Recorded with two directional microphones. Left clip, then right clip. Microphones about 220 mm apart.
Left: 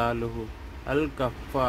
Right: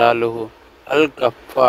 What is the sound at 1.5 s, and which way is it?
Speech, 40° right (ahead or behind).